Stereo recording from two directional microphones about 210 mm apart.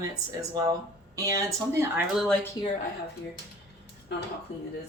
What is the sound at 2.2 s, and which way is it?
Speech, 5° left (ahead or behind).